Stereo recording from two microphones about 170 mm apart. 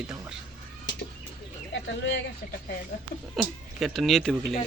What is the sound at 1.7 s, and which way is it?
Speech, 90° left.